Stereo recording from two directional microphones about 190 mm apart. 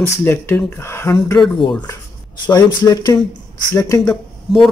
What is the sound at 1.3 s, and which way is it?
Speech, centre (ahead or behind).